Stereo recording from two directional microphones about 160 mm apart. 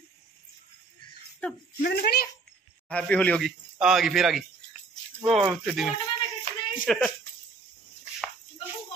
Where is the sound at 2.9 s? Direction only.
10° left (ahead or behind).